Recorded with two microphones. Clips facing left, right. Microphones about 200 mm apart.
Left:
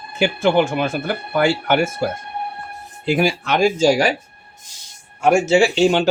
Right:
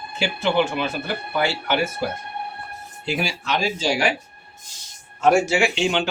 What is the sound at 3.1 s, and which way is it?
Speech, 55° left (ahead or behind).